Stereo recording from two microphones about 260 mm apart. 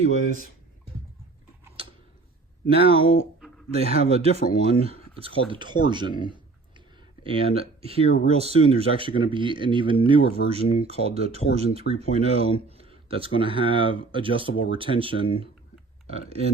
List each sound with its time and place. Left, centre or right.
0.0 s speech: right
2.6 s speech: right
6.7 s a sound: centre
8.3 s speech: right